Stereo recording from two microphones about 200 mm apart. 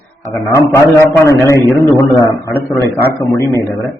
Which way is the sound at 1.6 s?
15° left (ahead or behind).